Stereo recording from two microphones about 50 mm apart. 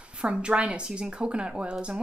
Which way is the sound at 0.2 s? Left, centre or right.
Centre.